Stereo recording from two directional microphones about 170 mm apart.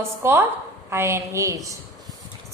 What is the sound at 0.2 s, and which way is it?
A woman's voice, 15° right (ahead or behind).